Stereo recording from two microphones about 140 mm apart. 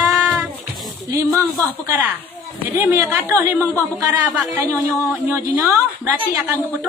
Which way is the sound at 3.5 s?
15° left (ahead or behind).